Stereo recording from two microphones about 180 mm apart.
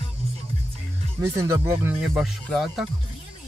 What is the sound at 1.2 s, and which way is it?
Speech, 15° right (ahead or behind).